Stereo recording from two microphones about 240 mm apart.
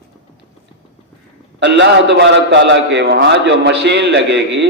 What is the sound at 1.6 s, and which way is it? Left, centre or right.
A man's voice, right.